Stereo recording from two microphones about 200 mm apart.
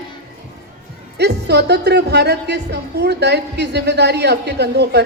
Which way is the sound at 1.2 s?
60° right (ahead or behind).